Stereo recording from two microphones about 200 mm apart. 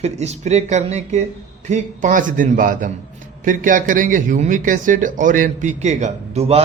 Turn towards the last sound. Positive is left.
turn(degrees=-30)  # may be behind; listen again after turning